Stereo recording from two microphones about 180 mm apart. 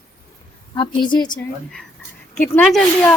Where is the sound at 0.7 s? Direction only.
25° left (ahead or behind).